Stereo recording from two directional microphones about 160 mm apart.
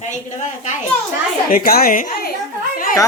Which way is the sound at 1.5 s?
65° left (ahead or behind).